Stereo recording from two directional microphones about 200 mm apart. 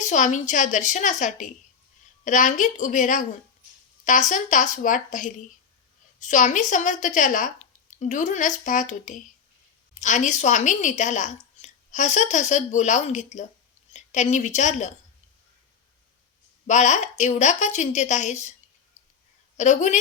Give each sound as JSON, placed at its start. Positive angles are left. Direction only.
{"t": 0.0, "sound": "a woman's voice", "side_deg": 40}
{"t": 16.6, "sound": "a woman's voice", "side_deg": 35}
{"t": 19.5, "sound": "a woman's voice", "side_deg": 35}